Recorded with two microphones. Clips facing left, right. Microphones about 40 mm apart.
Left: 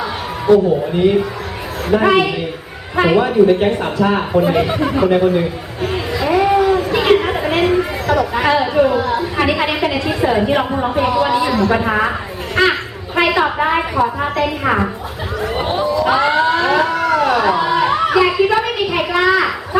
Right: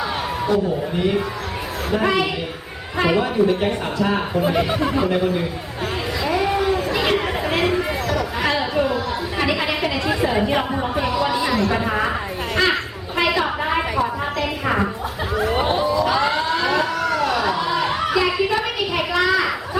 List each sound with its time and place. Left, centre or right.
0.4 s a woman's voice: centre
6.1 s a sound: centre
6.9 s chatter: centre
8.0 s a woman's voice: left
11.4 s speech: centre
11.7 s a woman's voice: left
13.2 s a sound: left
14.0 s a woman's voice: left
15.4 s speech: centre
16.0 s a sound: left
17.9 s a child's voice: centre